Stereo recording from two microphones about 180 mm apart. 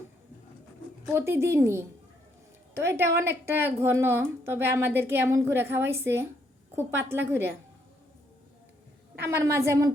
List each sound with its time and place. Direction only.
1.0 s a woman's voice: 10° right (ahead or behind)
9.2 s a woman's voice: 15° right (ahead or behind)